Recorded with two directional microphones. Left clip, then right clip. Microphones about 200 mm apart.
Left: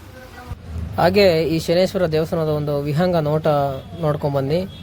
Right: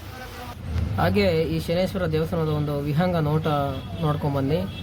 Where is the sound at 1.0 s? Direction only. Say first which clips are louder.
Left 7 dB; 35° left (ahead or behind).